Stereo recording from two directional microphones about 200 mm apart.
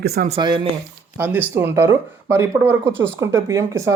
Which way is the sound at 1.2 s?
10° right (ahead or behind).